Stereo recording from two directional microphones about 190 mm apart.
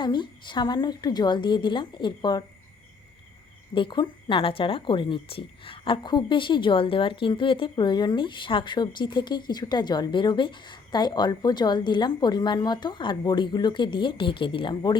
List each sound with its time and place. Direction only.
0.0 s speech: 25° left (ahead or behind)
3.8 s speech: 25° left (ahead or behind)